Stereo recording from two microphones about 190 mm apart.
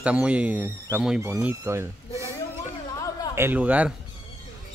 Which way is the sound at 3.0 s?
20° left (ahead or behind).